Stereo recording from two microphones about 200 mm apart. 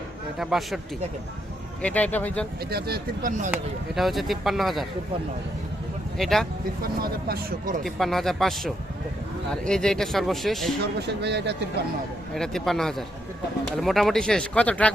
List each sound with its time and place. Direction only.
0.3 s speech: centre (ahead or behind)
1.8 s speech: 5° left (ahead or behind)
2.6 s speech: 50° right (ahead or behind)
3.5 s speech: centre (ahead or behind)
6.1 s speech: centre (ahead or behind)
6.8 s speech: 50° right (ahead or behind)
7.9 s speech: centre (ahead or behind)
11.0 s speech: 55° right (ahead or behind)
12.3 s speech: centre (ahead or behind)